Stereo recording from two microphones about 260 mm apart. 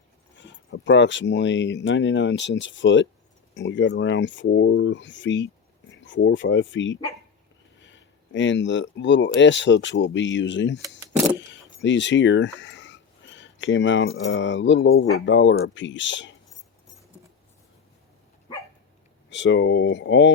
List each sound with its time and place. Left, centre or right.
0.7 s speech: left
10.8 s vehicle: centre
11.3 s speech: left
19.3 s speech: left